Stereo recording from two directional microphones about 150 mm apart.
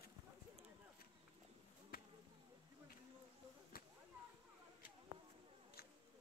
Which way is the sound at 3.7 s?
80° left.